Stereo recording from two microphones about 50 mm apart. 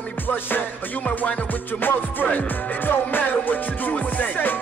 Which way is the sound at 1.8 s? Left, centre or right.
Left.